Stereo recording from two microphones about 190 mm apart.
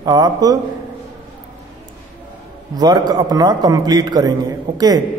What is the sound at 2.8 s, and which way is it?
A man's voice, 20° right (ahead or behind).